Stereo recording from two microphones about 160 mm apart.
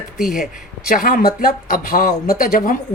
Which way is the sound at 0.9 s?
65° left (ahead or behind).